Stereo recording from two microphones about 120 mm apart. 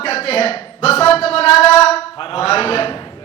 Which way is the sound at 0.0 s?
60° left (ahead or behind).